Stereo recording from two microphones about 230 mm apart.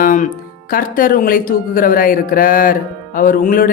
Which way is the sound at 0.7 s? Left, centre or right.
Left.